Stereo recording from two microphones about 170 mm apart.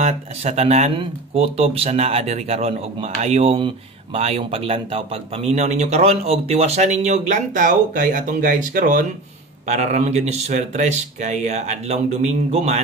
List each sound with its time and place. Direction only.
0.0 s speech: 40° right (ahead or behind)